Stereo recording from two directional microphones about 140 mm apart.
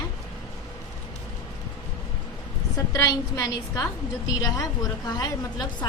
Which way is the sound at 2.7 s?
25° left (ahead or behind).